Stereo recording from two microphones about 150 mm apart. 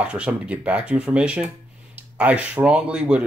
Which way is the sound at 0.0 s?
10° right (ahead or behind).